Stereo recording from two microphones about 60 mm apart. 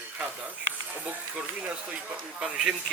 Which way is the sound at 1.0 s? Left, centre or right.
Right.